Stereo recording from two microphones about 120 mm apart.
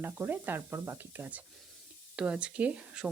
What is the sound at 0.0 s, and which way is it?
Speech, 15° right (ahead or behind).